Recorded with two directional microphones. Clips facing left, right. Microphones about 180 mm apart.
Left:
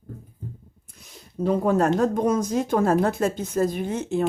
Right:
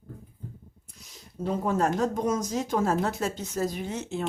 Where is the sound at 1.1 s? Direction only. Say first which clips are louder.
Left 7 dB; 60° left (ahead or behind).